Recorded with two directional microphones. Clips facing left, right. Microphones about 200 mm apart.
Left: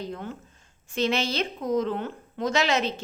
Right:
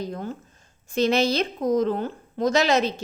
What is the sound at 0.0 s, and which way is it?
A woman's voice, 40° right (ahead or behind).